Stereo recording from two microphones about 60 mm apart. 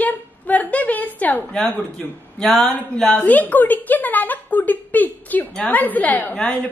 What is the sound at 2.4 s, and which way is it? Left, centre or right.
Speech, centre.